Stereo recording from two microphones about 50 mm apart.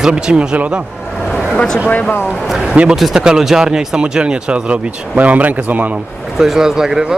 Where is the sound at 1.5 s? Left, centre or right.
Centre.